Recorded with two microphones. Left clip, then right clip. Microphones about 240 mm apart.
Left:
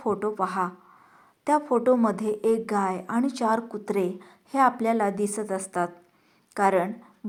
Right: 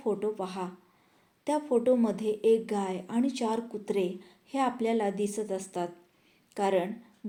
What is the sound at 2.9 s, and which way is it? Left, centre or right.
Speech, left.